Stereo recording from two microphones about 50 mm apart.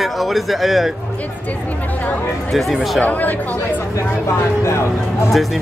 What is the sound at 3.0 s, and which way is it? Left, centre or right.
Speech, left.